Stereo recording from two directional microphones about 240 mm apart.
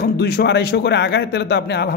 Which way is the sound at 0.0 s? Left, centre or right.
Left.